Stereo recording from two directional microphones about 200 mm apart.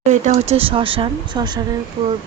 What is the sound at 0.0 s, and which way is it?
Speech, 35° right (ahead or behind).